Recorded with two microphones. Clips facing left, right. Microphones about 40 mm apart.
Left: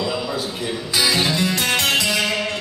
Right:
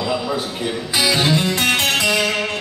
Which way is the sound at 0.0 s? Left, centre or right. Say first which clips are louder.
Right 2 dB; centre.